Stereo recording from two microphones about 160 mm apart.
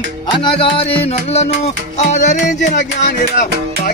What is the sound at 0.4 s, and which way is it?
Music, 30° left (ahead or behind).